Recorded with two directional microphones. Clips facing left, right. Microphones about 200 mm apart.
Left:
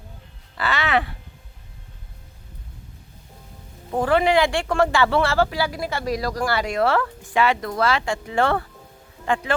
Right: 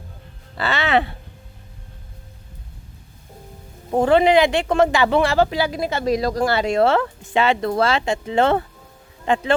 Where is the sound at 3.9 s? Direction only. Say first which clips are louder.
Right 4 dB; 25° right (ahead or behind).